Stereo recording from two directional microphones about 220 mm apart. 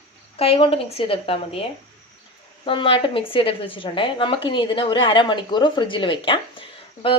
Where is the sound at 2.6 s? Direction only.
25° left (ahead or behind).